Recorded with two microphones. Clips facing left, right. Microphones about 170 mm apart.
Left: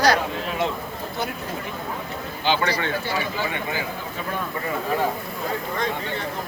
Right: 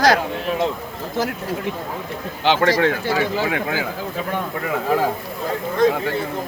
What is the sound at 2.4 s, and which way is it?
Speech, 85° right.